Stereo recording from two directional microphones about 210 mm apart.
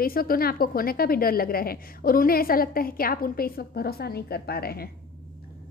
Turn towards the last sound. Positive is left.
turn(degrees=45)  # may be behind; listen again after turning